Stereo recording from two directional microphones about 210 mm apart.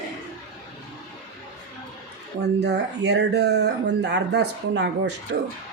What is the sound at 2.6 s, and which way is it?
Speech, 55° right (ahead or behind).